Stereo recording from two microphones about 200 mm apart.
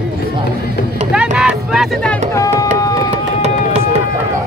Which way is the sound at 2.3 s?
15° left (ahead or behind).